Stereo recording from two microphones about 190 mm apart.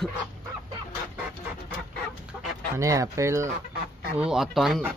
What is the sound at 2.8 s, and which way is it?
Speech, 15° right (ahead or behind).